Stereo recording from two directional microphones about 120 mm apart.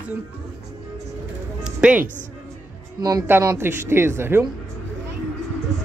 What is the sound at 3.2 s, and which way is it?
A woman's voice, 20° right (ahead or behind).